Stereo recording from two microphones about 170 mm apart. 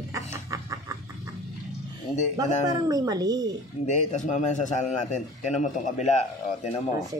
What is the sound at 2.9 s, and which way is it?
Speech, 20° right (ahead or behind).